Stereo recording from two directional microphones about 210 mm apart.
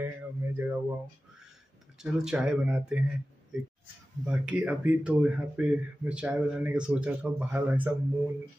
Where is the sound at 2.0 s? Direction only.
5° right (ahead or behind).